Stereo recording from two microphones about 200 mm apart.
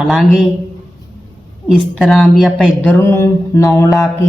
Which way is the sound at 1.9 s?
Centre (ahead or behind).